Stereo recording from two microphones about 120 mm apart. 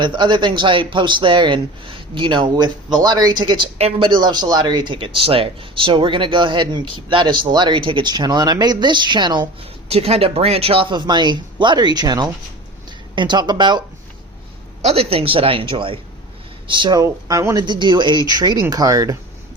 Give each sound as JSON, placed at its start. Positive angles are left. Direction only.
{"t": 0.0, "sound": "speech", "side_deg": -40}
{"t": 3.8, "sound": "speech", "side_deg": -50}
{"t": 9.9, "sound": "speech", "side_deg": -55}
{"t": 14.8, "sound": "speech", "side_deg": -60}